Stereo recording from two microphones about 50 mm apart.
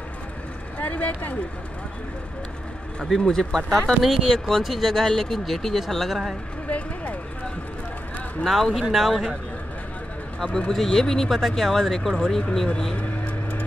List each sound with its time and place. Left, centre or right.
0.7 s speech: left
3.0 s speech: centre
4.0 s speech: centre
6.7 s speech: left
8.5 s speech: centre
10.7 s speech: centre